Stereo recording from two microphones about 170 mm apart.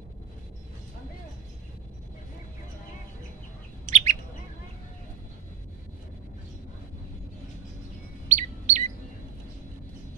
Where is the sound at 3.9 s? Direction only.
40° right (ahead or behind).